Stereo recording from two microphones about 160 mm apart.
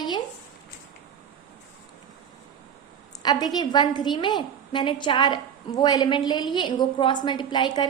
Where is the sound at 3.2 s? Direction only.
25° left (ahead or behind).